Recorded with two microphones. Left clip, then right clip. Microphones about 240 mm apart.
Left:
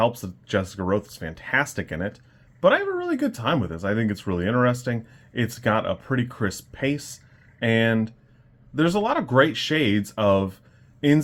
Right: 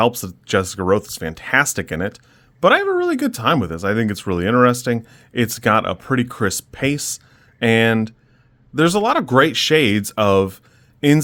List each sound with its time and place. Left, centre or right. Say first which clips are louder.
0.0 s speech: right 5 dB; right